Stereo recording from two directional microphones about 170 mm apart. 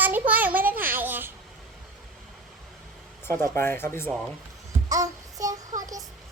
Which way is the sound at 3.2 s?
15° left (ahead or behind).